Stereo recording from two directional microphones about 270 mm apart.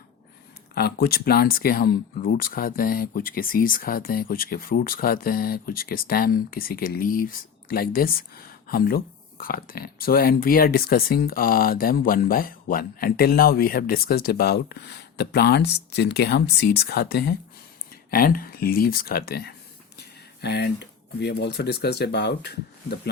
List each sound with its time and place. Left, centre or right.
0.7 s speech: left